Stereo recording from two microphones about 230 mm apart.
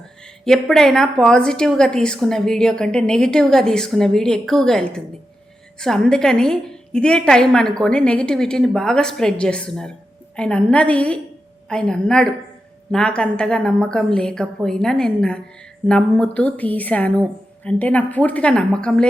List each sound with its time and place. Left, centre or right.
0.0 s a woman's voice: centre